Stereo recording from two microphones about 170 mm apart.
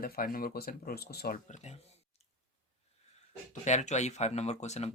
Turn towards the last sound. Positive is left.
turn(degrees=40)  # may be behind; listen again after turning